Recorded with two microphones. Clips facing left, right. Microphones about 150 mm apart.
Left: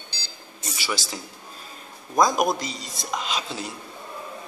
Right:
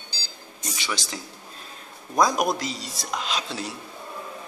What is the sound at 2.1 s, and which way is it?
A man's voice, centre (ahead or behind).